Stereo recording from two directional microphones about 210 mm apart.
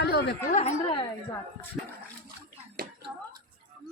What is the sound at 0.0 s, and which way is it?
Chatter, 50° left (ahead or behind).